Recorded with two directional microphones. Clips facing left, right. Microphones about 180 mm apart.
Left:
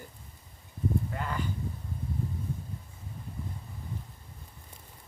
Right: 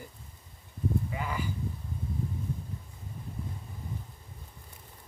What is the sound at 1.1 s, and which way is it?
Speech, 5° right (ahead or behind).